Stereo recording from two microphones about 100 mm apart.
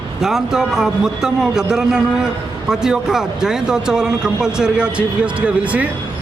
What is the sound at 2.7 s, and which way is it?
Speech, 5° right (ahead or behind).